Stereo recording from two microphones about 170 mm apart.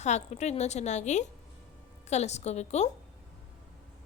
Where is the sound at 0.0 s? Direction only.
40° left (ahead or behind).